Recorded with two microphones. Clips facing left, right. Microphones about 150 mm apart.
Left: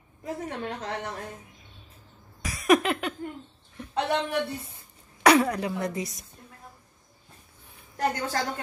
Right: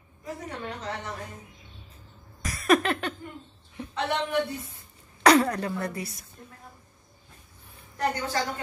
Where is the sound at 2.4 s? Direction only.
10° left (ahead or behind).